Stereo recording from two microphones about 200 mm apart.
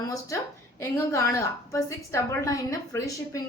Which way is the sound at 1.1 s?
15° left (ahead or behind).